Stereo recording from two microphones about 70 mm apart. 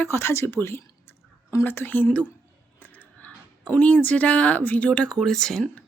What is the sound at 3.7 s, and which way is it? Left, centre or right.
Speech, left.